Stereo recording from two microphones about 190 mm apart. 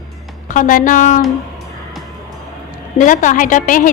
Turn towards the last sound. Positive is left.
turn(degrees=45)  # may be behind; listen again after turning